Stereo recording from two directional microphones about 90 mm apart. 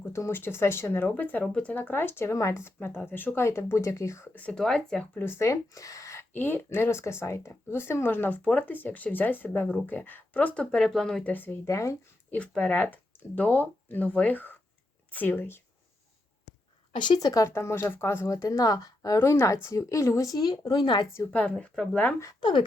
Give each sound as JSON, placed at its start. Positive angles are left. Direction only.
{"t": 0.0, "sound": "speech", "side_deg": 30}
{"t": 4.4, "sound": "speech", "side_deg": 15}
{"t": 5.2, "sound": "speech", "side_deg": 30}
{"t": 6.3, "sound": "speech", "side_deg": 25}
{"t": 11.3, "sound": "speech", "side_deg": 20}
{"t": 12.3, "sound": "speech", "side_deg": 15}
{"t": 16.9, "sound": "speech", "side_deg": 60}
{"t": 17.2, "sound": "speech", "side_deg": 40}
{"t": 18.3, "sound": "speech", "side_deg": 40}
{"t": 21.3, "sound": "speech", "side_deg": 15}
{"t": 22.4, "sound": "speech", "side_deg": 60}